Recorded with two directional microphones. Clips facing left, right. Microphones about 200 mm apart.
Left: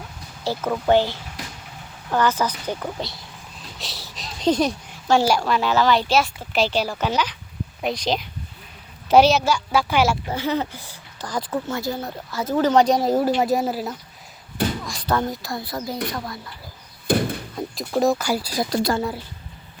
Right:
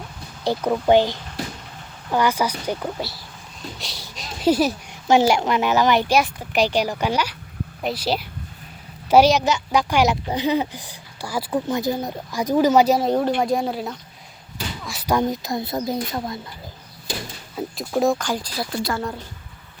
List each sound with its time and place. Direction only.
0.4 s speech: 15° right (ahead or behind)
4.9 s speech: 20° right (ahead or behind); by 13.9 s 5° left (ahead or behind)
14.8 s a child's voice: 10° right (ahead or behind)
17.1 s a sound: 55° left (ahead or behind)
17.5 s speech: 5° right (ahead or behind)